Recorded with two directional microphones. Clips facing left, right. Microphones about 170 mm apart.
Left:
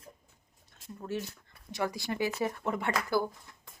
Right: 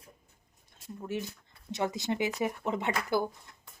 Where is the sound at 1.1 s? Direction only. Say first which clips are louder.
Even; 15° right (ahead or behind).